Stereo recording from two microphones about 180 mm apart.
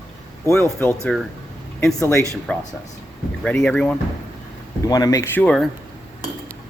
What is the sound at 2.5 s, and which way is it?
Speech, 5° left (ahead or behind).